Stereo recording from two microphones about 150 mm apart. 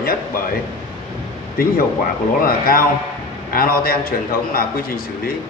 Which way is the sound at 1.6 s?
80° left.